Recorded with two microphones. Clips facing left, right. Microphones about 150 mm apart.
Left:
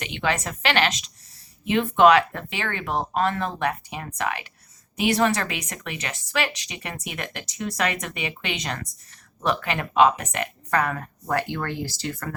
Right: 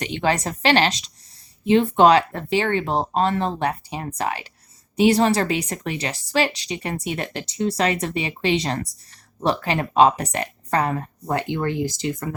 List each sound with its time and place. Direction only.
0.0 s a woman's voice: 35° right (ahead or behind); by 12.3 s 20° right (ahead or behind)